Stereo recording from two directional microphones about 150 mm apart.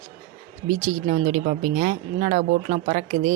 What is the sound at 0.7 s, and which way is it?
Speech, 55° right (ahead or behind).